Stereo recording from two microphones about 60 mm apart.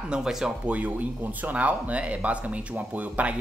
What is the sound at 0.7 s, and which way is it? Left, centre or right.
Speech, right.